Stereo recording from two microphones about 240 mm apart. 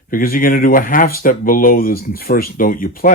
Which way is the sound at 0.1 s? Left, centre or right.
Left.